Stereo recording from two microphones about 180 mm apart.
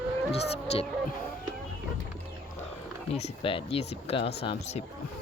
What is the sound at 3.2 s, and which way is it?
Speech, 35° left (ahead or behind).